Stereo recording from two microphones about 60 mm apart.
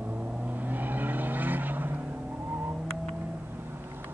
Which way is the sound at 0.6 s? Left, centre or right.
Right.